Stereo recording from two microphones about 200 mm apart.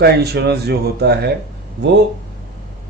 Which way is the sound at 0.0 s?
55° right (ahead or behind).